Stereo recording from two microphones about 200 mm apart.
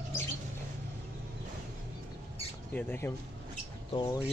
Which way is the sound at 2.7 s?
10° left (ahead or behind).